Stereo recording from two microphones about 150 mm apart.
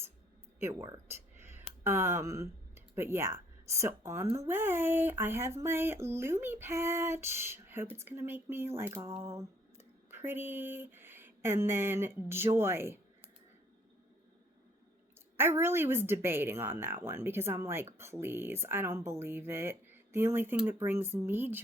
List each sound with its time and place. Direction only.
0.6 s speech: 20° right (ahead or behind)
15.4 s speech: 15° right (ahead or behind)